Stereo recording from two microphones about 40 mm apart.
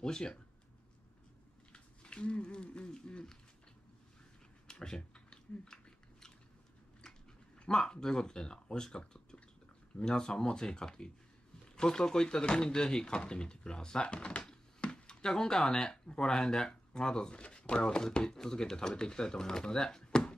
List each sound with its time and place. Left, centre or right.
0.0 s speech: centre
1.7 s speech: left
4.6 s a sound: left
7.7 s speech: centre
14.8 s a sound: left; by 15.9 s centre
15.9 s speech: centre